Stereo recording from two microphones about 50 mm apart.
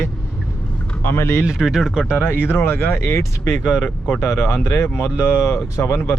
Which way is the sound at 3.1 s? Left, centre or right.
Left.